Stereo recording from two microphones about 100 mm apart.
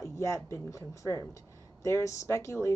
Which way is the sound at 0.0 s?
30° left (ahead or behind).